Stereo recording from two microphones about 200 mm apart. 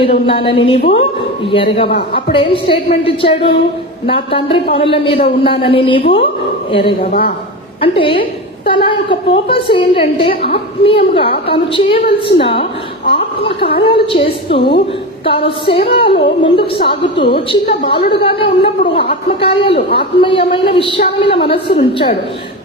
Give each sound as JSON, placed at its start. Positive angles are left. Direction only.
{"t": 0.0, "sound": "a woman's voice", "side_deg": 25}
{"t": 16.1, "sound": "a woman's voice", "side_deg": 55}
{"t": 16.6, "sound": "a woman's voice", "side_deg": 25}